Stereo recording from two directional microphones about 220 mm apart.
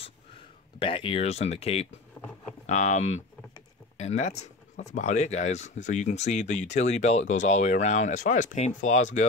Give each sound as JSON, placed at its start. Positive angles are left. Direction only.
{"t": 0.7, "sound": "speech", "side_deg": 25}
{"t": 2.2, "sound": "vehicle", "side_deg": 10}
{"t": 2.6, "sound": "speech", "side_deg": 30}